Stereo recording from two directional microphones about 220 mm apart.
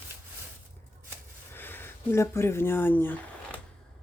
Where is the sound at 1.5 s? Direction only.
10° left (ahead or behind).